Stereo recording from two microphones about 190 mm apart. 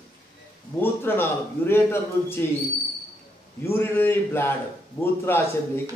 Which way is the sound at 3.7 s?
10° left (ahead or behind).